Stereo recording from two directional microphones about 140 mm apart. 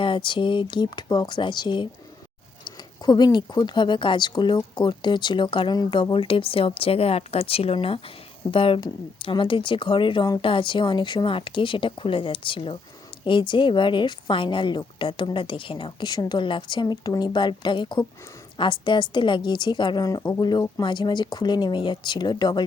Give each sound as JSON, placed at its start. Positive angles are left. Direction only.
{"t": 0.0, "sound": "speech", "side_deg": 35}